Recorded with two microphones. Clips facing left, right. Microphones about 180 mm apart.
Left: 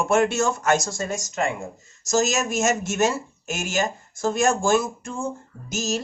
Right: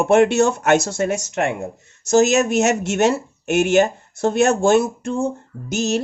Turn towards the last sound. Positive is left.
turn(degrees=-60)  # may be behind; listen again after turning